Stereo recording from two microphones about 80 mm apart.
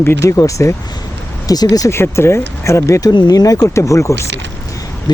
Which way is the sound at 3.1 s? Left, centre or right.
Left.